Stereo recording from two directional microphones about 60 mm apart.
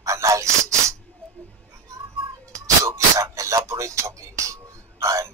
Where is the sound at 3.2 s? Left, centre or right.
Right.